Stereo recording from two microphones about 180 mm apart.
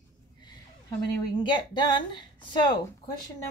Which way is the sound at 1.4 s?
25° left (ahead or behind).